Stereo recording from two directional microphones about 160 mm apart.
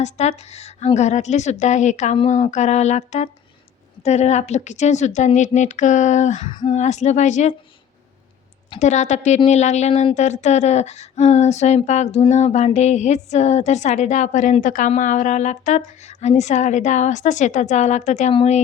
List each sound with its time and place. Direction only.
0.0 s speech: 45° left (ahead or behind)
8.8 s speech: 45° left (ahead or behind)